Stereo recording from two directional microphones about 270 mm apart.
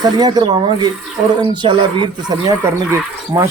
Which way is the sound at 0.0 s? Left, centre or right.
Centre.